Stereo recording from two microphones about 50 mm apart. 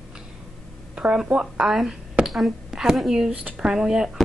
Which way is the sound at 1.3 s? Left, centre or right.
Centre.